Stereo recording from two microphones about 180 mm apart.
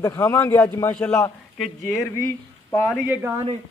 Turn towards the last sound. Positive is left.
turn(degrees=-10)  # may be behind; listen again after turning